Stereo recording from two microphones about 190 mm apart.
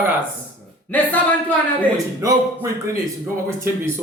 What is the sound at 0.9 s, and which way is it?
Speech, 10° left (ahead or behind).